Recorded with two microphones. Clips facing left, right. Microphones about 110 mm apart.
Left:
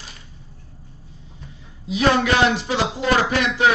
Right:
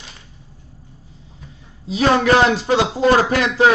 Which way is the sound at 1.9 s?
40° right (ahead or behind).